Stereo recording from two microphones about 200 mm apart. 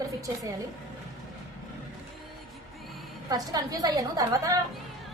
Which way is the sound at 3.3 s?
20° right (ahead or behind).